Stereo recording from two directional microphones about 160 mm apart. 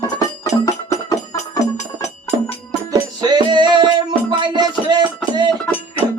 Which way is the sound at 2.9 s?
25° right (ahead or behind).